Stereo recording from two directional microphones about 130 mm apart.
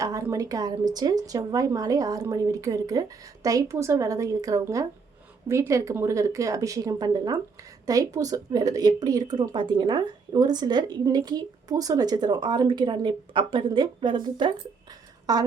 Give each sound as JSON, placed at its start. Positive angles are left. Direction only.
{"t": 0.0, "sound": "speech", "side_deg": -25}